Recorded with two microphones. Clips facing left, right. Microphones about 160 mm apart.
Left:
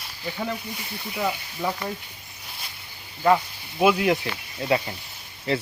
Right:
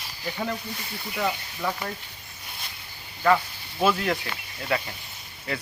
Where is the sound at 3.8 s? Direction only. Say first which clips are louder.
Left 4 dB; 15° left (ahead or behind).